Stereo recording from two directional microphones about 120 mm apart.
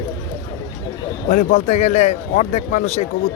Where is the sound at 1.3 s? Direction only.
90° left.